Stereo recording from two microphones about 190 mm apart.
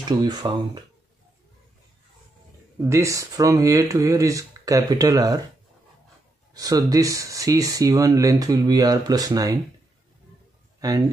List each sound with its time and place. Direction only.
0.2 s speech: 20° right (ahead or behind)
2.8 s speech: 15° right (ahead or behind)
6.5 s speech: 20° right (ahead or behind)
10.8 s speech: 20° right (ahead or behind)